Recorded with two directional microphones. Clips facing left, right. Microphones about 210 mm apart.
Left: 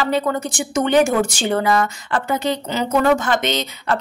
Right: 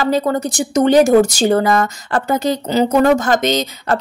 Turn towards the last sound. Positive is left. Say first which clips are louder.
# right 4 dB
turn(degrees=-40)  # may be behind; listen again after turning